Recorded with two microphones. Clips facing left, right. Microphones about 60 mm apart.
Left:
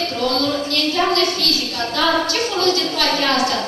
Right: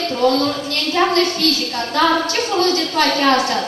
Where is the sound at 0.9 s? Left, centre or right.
Right.